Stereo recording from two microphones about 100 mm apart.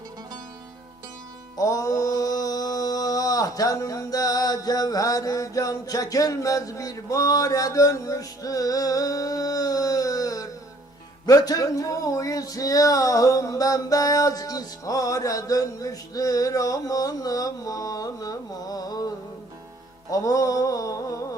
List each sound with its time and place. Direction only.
1.5 s music: 35° left (ahead or behind)
11.3 s speech: 35° left (ahead or behind)
20.1 s a sound: 35° left (ahead or behind)